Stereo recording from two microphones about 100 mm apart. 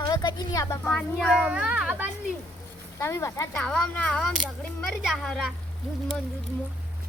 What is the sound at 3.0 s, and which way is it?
Speech, 30° left (ahead or behind).